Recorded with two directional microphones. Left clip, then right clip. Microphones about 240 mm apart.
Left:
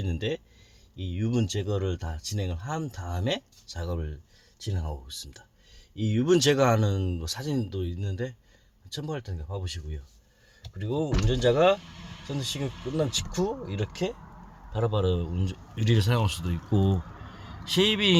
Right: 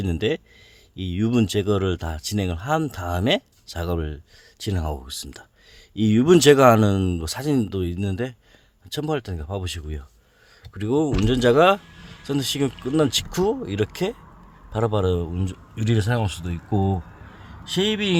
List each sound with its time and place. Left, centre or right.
0.0 s a man's voice: right; by 18.2 s centre